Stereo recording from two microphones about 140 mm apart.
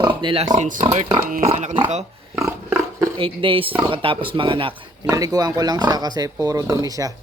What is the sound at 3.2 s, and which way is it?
Speech, 40° right (ahead or behind).